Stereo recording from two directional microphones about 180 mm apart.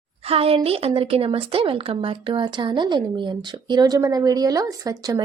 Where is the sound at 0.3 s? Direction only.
30° right (ahead or behind).